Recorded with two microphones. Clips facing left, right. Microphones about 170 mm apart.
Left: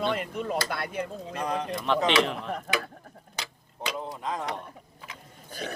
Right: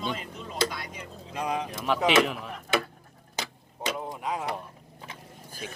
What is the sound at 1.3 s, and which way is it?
Speech, 10° right (ahead or behind).